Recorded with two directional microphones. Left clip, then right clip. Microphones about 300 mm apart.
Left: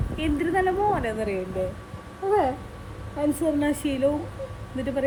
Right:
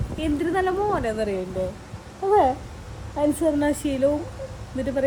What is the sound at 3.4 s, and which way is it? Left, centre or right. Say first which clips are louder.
Speech: right 2 dB; centre.